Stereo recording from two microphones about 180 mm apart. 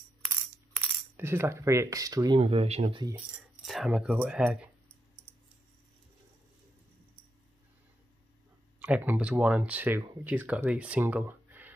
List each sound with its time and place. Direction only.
1.1 s speech: 10° right (ahead or behind); by 3.1 s 30° right (ahead or behind)
3.6 s speech: centre (ahead or behind)
8.7 s speech: 10° right (ahead or behind)